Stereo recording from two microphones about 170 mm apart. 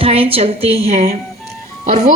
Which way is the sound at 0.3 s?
35° right (ahead or behind).